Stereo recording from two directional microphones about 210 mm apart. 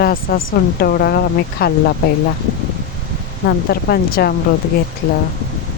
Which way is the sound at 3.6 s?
45° left (ahead or behind).